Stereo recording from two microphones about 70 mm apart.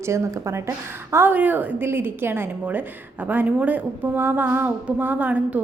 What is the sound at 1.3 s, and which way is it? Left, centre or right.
A woman's voice, right.